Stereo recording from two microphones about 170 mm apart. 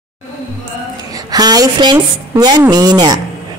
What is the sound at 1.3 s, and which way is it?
A man's voice, 25° right (ahead or behind).